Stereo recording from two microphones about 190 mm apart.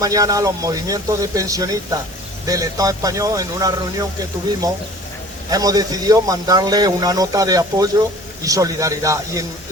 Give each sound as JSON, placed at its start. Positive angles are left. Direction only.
{"t": 0.0, "sound": "speech", "side_deg": -20}
{"t": 5.5, "sound": "a man's voice", "side_deg": -20}